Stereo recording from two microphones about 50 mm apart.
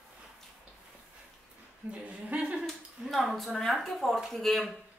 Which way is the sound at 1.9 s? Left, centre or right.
Right.